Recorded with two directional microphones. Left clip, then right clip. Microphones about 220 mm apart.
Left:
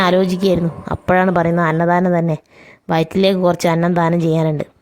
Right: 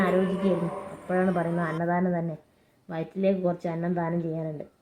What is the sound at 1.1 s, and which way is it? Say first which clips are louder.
A woman's voice: left 12 dB; 45° left (ahead or behind).